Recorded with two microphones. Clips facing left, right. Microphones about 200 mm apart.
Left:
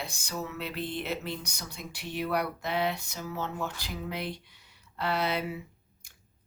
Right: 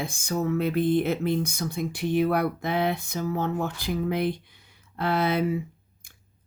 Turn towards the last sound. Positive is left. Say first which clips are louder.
# right 6 dB
turn(degrees=-50)  # may be behind; listen again after turning